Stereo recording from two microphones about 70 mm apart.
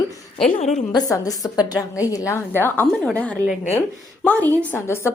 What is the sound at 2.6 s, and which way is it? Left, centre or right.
Speech, left.